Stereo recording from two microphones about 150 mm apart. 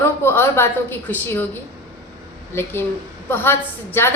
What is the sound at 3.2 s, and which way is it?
Speech, 15° left (ahead or behind).